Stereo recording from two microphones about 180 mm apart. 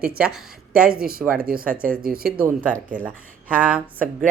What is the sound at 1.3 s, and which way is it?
Speech, 55° right (ahead or behind).